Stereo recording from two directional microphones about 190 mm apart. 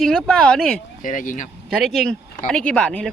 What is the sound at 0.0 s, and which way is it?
Speech, centre (ahead or behind).